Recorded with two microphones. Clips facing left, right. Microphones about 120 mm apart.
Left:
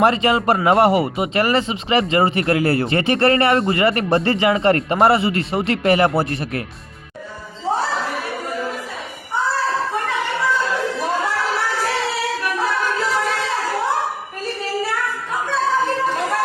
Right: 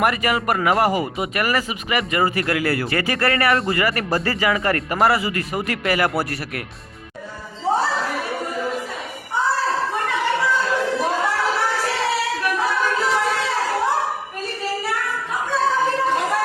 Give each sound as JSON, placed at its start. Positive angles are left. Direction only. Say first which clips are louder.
{"t": 0.0, "sound": "speech", "louder": "left 4 dB", "side_deg": 25}